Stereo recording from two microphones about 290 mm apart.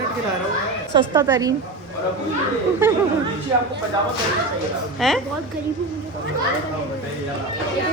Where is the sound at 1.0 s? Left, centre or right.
Centre.